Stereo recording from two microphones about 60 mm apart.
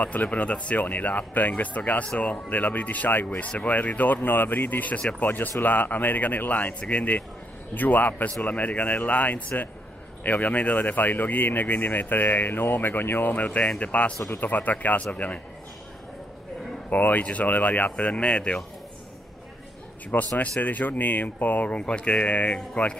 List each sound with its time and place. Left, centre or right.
0.0 s speech: left
14.1 s speech: left
14.4 s speech: left
16.9 s speech: left
20.1 s speech: left